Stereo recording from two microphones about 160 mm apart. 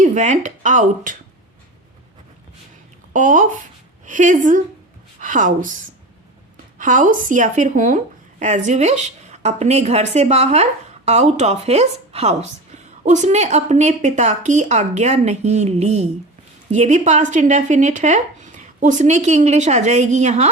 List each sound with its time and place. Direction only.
0.0 s speech: 50° right (ahead or behind)
3.1 s speech: 55° right (ahead or behind)
6.7 s speech: 55° right (ahead or behind)